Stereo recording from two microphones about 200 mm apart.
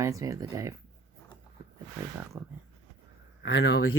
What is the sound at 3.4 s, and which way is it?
Speech, 60° left (ahead or behind).